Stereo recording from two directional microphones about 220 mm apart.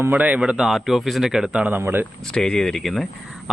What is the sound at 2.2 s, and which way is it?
A man's voice, 5° left (ahead or behind).